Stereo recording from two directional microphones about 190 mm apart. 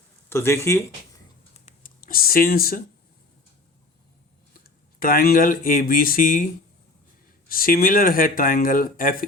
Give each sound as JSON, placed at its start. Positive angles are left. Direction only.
{"t": 0.3, "sound": "speech", "side_deg": 15}
{"t": 1.6, "sound": "a sound", "side_deg": 50}
{"t": 4.6, "sound": "speech", "side_deg": 50}